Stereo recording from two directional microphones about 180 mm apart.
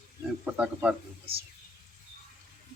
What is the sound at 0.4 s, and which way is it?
Speech, 5° right (ahead or behind).